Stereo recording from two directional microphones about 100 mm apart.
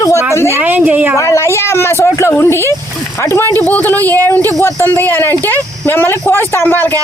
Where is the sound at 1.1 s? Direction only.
30° left (ahead or behind).